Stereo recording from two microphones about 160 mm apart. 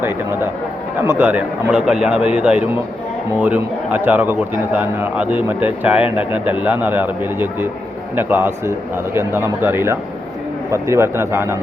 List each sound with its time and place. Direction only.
1.0 s a man's voice: 10° right (ahead or behind)